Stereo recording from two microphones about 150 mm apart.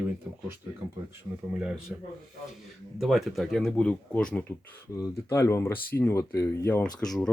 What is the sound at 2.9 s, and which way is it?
Speech, centre (ahead or behind).